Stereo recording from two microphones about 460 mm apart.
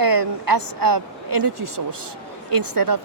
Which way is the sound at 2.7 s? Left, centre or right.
Right.